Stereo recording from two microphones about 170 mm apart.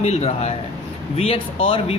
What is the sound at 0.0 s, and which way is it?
A man's voice, 40° left (ahead or behind).